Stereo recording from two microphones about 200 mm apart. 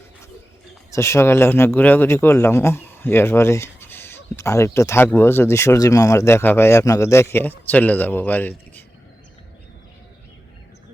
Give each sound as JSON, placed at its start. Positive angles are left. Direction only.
{"t": 0.9, "sound": "speech", "side_deg": 15}